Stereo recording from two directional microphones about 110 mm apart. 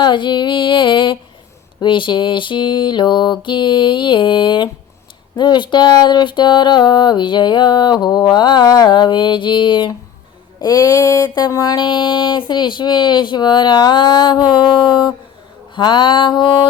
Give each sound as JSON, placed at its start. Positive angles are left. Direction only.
{"t": 0.0, "sound": "speech", "side_deg": 45}
{"t": 10.6, "sound": "a sound", "side_deg": 35}
{"t": 11.3, "sound": "speech", "side_deg": 40}